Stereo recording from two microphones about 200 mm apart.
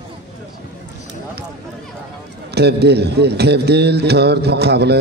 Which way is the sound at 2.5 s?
55° right (ahead or behind).